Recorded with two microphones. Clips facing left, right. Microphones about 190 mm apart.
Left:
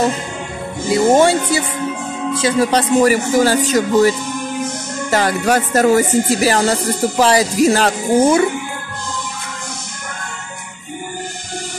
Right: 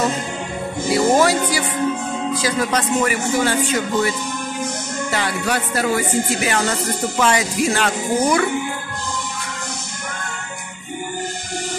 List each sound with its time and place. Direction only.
0.8 s speech: 25° left (ahead or behind)
5.1 s speech: 45° left (ahead or behind)
8.2 s speech: 25° left (ahead or behind)